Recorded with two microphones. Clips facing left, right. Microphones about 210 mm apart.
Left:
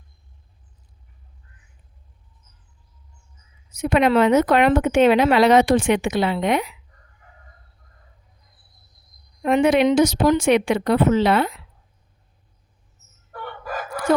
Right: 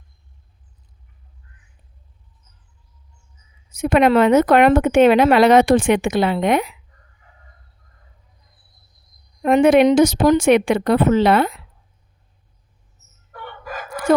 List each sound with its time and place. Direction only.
3.7 s speech: 50° right (ahead or behind)
9.4 s speech: 50° right (ahead or behind)